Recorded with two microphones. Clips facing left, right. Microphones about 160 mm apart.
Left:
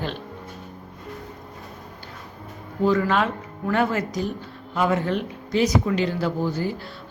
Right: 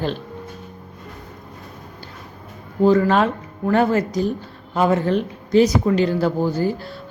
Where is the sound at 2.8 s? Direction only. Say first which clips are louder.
Right 5 dB; 35° right (ahead or behind).